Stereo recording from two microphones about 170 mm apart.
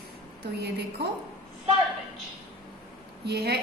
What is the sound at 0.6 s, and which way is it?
Speech, 75° right (ahead or behind).